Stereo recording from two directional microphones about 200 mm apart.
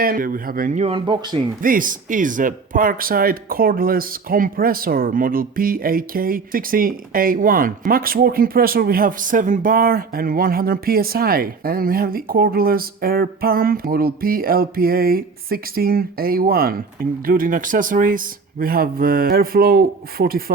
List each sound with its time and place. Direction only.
0.0 s speech: 45° right (ahead or behind); by 1.4 s 25° right (ahead or behind)
1.6 s speech: 45° right (ahead or behind)